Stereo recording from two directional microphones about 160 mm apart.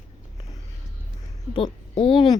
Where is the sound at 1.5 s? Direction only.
35° left (ahead or behind).